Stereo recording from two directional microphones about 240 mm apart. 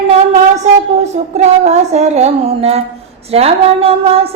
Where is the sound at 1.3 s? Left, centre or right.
Right.